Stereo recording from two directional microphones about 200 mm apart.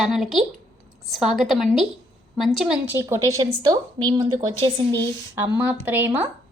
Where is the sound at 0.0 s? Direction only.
Centre (ahead or behind); by 4.7 s 25° right (ahead or behind).